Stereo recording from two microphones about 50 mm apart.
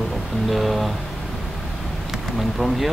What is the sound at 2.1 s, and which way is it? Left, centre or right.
Speech, centre.